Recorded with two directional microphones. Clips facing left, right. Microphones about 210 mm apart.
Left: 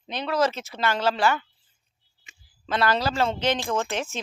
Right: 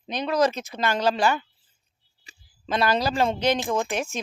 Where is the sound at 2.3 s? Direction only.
35° right (ahead or behind).